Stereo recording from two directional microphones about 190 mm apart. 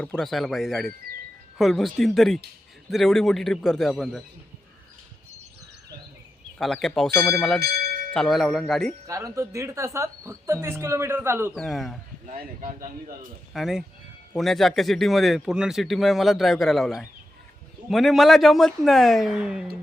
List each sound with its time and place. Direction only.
0.0 s speech: 5° left (ahead or behind)
6.8 s speech: centre (ahead or behind)
9.0 s speech: 15° right (ahead or behind)
11.5 s speech: centre (ahead or behind)
12.2 s speech: 45° right (ahead or behind)
13.5 s speech: centre (ahead or behind)